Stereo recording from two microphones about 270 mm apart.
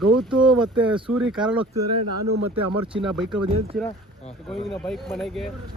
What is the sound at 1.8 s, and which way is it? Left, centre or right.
Speech, right.